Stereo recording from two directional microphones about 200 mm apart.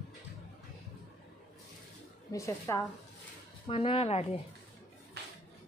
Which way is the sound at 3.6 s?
30° left (ahead or behind).